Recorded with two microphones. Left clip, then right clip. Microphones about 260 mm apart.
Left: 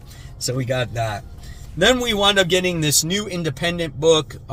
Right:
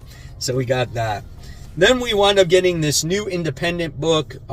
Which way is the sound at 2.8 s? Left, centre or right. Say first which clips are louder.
Even; centre.